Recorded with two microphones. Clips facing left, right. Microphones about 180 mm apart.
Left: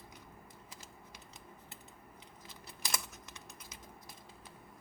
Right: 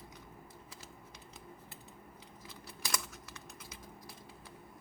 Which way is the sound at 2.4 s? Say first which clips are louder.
Right 1 dB; 20° left (ahead or behind).